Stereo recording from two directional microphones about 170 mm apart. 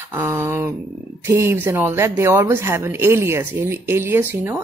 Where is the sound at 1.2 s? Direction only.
15° right (ahead or behind).